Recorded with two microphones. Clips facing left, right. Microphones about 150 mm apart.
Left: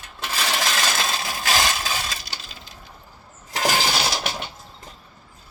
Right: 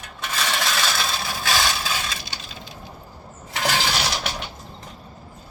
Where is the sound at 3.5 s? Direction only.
40° left (ahead or behind).